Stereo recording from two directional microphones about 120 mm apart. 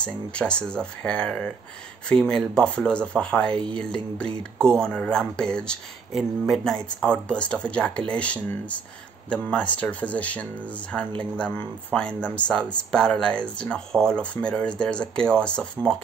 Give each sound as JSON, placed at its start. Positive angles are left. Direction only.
{"t": 0.0, "sound": "speech", "side_deg": 10}